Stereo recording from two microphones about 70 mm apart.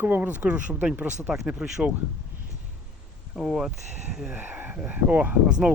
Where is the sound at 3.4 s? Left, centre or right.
Centre.